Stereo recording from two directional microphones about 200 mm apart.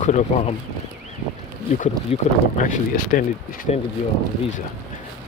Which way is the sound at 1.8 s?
40° left (ahead or behind).